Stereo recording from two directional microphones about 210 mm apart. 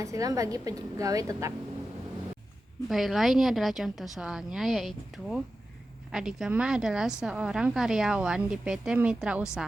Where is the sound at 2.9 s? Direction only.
Centre (ahead or behind).